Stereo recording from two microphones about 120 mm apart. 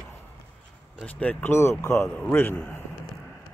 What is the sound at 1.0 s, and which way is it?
A man's voice, 10° left (ahead or behind).